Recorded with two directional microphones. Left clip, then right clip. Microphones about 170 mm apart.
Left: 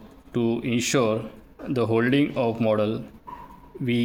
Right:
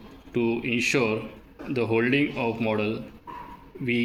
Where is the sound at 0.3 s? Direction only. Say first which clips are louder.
Even; 60° left (ahead or behind).